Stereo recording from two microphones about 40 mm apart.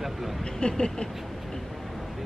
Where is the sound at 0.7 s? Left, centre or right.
Centre.